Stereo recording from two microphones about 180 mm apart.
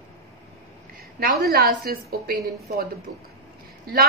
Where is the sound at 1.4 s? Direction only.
55° right (ahead or behind).